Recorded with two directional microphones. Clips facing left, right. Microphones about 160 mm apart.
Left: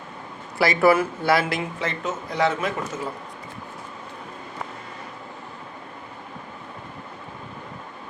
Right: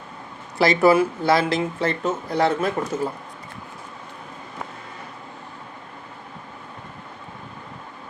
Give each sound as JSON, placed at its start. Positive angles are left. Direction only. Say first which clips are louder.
{"t": 0.6, "sound": "speech", "louder": "right 2 dB", "side_deg": -20}